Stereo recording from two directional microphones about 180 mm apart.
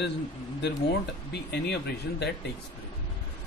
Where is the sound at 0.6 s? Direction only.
65° left (ahead or behind).